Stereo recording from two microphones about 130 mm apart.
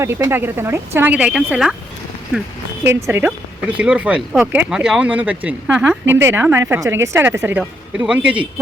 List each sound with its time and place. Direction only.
0.3 s speech: 15° right (ahead or behind)
2.8 s a woman's voice: 15° right (ahead or behind)